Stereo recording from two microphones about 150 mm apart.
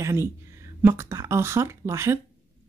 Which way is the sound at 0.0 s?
20° right (ahead or behind).